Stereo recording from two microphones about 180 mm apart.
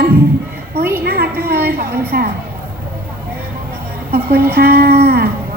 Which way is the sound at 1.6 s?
55° right (ahead or behind).